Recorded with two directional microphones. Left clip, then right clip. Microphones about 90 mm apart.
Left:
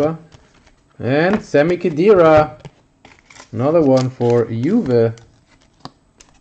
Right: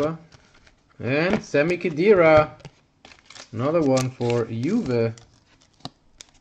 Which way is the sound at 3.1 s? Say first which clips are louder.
Left 2 dB; 45° right (ahead or behind).